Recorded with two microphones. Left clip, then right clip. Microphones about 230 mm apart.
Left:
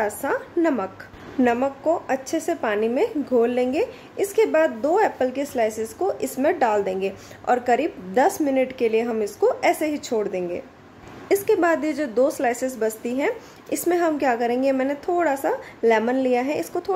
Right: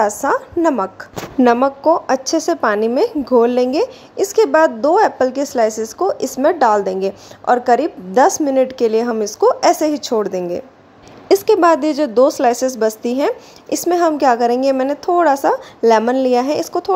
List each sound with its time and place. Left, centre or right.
0.0 s a woman's voice: centre